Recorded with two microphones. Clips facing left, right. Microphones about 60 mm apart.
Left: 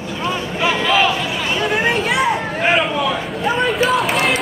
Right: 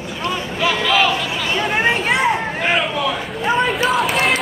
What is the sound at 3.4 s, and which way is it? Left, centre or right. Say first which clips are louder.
Run: even; centre.